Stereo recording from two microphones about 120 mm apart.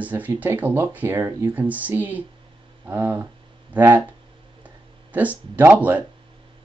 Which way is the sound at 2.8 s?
20° right (ahead or behind).